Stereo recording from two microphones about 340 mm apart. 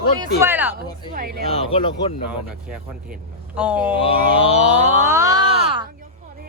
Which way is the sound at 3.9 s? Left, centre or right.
Centre.